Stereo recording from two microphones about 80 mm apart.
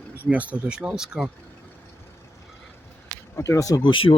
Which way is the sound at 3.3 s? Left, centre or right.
Left.